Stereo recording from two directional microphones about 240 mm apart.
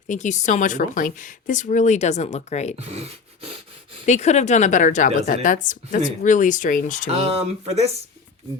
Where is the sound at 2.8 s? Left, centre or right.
Right.